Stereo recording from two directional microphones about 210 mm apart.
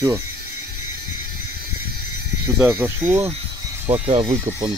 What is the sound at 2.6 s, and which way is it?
Speech, 10° right (ahead or behind).